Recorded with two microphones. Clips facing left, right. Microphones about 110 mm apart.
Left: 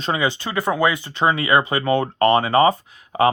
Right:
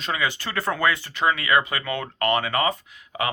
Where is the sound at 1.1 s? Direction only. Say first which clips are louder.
Left 4 dB; 30° left (ahead or behind).